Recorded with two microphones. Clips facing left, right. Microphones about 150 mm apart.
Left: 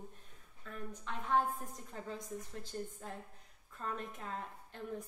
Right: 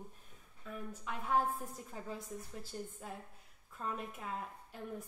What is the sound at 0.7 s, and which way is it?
A woman's voice, 5° right (ahead or behind).